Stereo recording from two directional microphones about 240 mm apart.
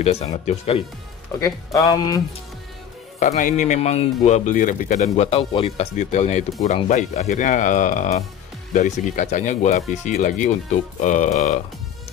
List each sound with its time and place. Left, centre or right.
0.0 s speech: left
3.2 s speech: left